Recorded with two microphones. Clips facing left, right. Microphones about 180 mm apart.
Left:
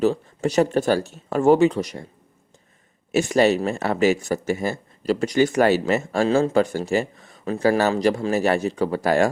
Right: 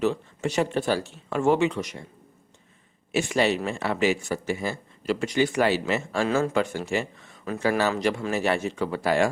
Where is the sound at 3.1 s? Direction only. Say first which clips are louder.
Left 5 dB; 40° left (ahead or behind).